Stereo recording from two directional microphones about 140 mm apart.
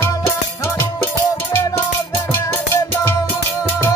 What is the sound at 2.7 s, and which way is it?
Music, 15° left (ahead or behind).